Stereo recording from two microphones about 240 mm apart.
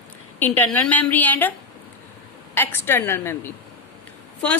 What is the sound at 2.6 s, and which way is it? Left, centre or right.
A woman's voice, centre.